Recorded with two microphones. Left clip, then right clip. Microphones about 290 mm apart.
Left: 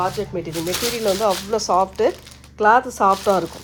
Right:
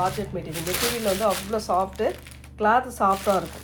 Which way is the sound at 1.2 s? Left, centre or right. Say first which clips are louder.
Left 5 dB; left.